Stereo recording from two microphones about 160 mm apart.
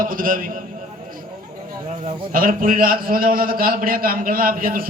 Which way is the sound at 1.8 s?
45° right (ahead or behind).